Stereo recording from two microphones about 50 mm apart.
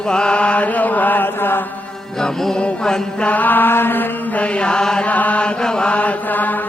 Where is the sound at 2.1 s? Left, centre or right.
Centre.